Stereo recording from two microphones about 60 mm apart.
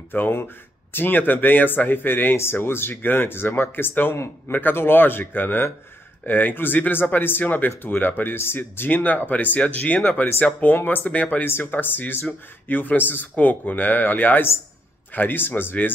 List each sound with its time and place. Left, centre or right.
0.1 s speech: left
11.1 s speech: left
11.4 s speech: left